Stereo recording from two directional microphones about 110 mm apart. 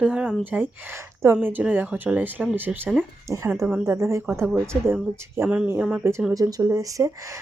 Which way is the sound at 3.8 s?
30° right (ahead or behind).